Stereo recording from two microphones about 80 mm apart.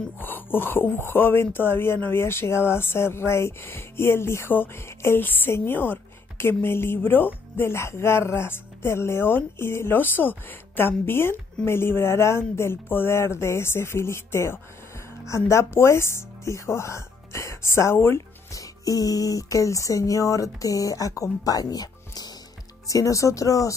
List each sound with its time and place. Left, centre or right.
0.2 s speech: left